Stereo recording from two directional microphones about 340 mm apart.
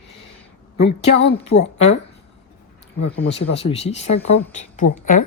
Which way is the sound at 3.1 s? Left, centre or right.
Centre.